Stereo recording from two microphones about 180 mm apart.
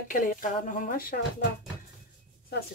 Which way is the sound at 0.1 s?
50° left (ahead or behind).